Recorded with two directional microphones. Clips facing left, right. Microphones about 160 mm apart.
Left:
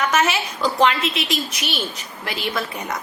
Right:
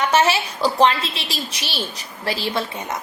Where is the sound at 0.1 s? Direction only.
30° right (ahead or behind).